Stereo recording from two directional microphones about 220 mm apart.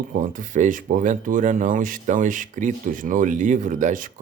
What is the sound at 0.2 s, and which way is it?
Speech, 35° right (ahead or behind).